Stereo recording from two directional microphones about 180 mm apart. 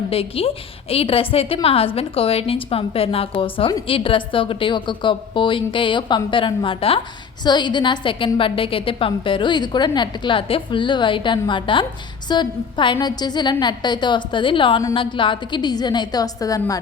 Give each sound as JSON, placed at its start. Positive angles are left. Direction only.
{"t": 0.1, "sound": "a woman's voice", "side_deg": 30}